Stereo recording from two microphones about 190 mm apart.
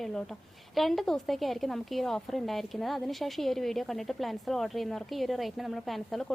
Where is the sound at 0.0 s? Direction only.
Centre (ahead or behind).